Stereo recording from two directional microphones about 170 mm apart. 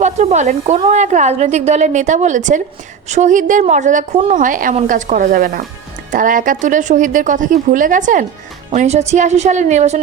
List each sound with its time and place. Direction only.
0.0 s a woman's voice: 45° right (ahead or behind)